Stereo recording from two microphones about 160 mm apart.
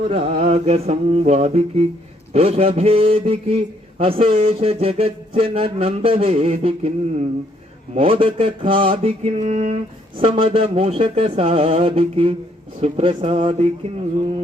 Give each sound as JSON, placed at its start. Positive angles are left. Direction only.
{"t": 0.1, "sound": "a man's voice", "side_deg": -40}
{"t": 7.9, "sound": "a man's voice", "side_deg": -35}